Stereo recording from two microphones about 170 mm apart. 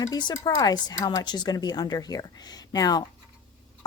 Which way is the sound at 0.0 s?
25° left (ahead or behind).